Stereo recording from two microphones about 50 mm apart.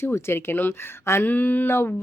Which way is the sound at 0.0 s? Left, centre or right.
Left.